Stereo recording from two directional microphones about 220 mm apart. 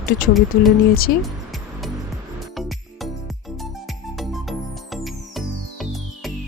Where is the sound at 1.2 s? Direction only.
Centre (ahead or behind).